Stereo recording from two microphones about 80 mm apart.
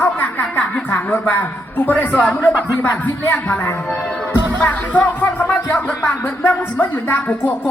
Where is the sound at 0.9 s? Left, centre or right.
Left.